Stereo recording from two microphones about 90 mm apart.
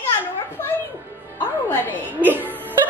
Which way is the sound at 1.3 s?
25° left (ahead or behind).